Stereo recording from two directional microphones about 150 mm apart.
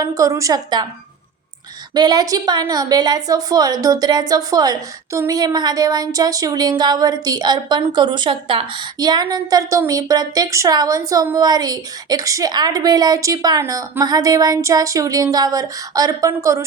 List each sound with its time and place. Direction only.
0.0 s a woman's voice: 20° right (ahead or behind)
2.0 s a woman's voice: 25° right (ahead or behind)